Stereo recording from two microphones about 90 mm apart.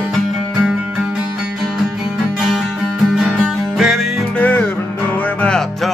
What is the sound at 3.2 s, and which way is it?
Music, 5° right (ahead or behind).